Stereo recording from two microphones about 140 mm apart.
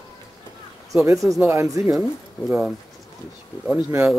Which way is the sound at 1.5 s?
20° right (ahead or behind).